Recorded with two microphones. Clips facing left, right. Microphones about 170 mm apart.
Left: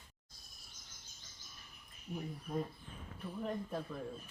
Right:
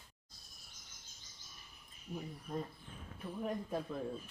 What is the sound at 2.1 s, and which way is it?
Speech, centre (ahead or behind).